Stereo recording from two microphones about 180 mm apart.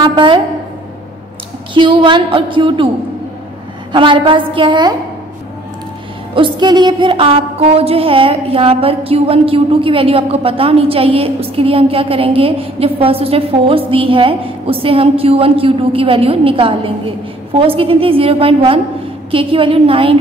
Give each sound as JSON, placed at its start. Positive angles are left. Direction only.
{"t": 0.0, "sound": "a woman's voice", "side_deg": -25}
{"t": 1.7, "sound": "a woman's voice", "side_deg": -25}
{"t": 3.9, "sound": "a woman's voice", "side_deg": -25}
{"t": 6.3, "sound": "a woman's voice", "side_deg": -25}